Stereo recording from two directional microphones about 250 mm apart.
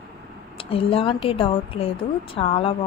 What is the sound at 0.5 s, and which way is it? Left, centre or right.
A woman's voice, left.